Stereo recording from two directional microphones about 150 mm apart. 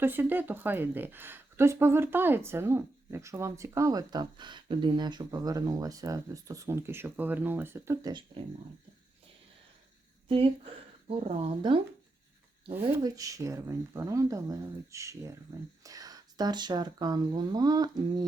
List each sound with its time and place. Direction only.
0.0 s speech: 15° right (ahead or behind)
10.2 s speech: 40° right (ahead or behind)
13.0 s speech: 25° right (ahead or behind)